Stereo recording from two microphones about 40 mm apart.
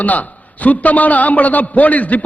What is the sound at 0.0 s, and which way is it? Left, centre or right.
A man's voice, left.